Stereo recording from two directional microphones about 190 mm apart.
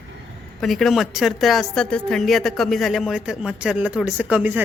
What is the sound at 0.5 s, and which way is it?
Speech, centre (ahead or behind).